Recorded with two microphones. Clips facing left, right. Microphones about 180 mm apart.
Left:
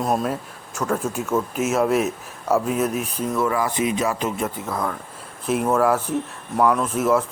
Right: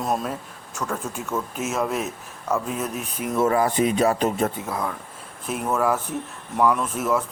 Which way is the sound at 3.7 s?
40° right (ahead or behind).